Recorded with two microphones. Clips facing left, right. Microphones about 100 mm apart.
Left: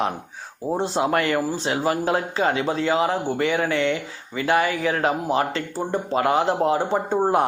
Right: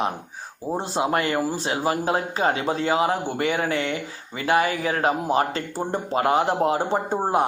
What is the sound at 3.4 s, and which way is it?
Speech, 40° right (ahead or behind).